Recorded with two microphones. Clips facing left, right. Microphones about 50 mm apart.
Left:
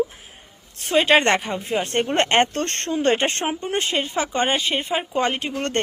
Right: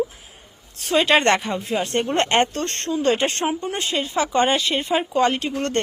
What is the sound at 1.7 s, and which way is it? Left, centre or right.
Speech, left.